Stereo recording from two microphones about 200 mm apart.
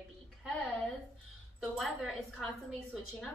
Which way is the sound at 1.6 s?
Centre (ahead or behind).